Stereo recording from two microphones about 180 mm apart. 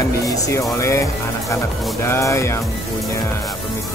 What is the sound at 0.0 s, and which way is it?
Speech, 20° left (ahead or behind).